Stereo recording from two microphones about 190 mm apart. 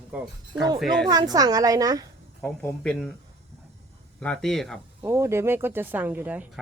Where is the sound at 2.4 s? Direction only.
5° left (ahead or behind).